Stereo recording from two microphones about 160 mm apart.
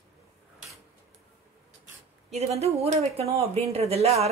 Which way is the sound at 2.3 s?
40° right (ahead or behind).